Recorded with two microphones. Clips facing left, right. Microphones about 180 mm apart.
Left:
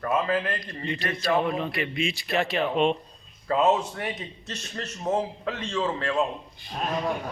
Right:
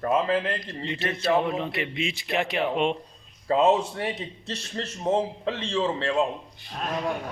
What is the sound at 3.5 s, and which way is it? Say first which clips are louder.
A man's voice: right 2 dB; 25° right (ahead or behind).